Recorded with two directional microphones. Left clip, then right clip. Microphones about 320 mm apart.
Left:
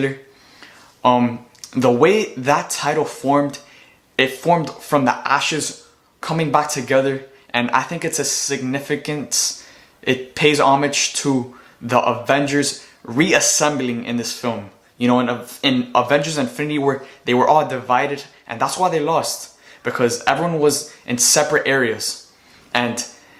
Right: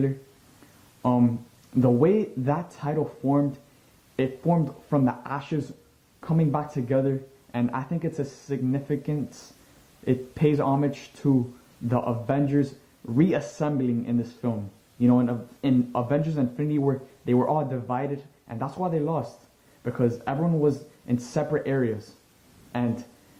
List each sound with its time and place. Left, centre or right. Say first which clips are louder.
1.0 s speech: left 9 dB; centre